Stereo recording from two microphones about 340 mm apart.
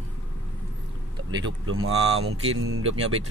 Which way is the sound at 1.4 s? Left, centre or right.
Right.